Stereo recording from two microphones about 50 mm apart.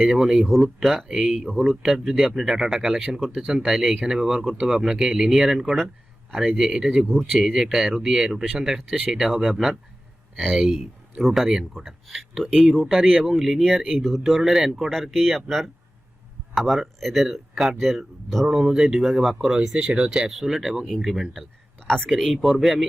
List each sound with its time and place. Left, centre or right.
0.8 s speech: centre
1.7 s speech: centre
3.2 s speech: centre
3.6 s speech: centre
6.3 s speech: centre
6.6 s speech: centre
12.9 s speech: centre
18.4 s speech: centre
21.8 s speech: centre